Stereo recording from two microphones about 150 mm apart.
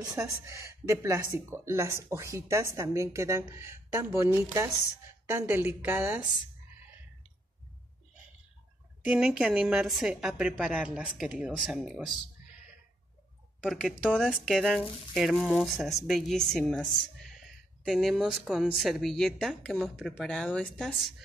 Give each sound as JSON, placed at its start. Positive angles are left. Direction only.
{"t": 0.0, "sound": "a woman's voice", "side_deg": -20}
{"t": 9.0, "sound": "speech", "side_deg": -5}
{"t": 13.7, "sound": "speech", "side_deg": 0}